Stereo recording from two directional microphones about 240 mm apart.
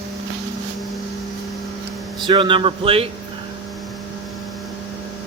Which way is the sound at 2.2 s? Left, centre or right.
Right.